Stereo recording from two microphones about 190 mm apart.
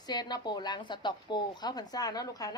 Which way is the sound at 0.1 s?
20° left (ahead or behind).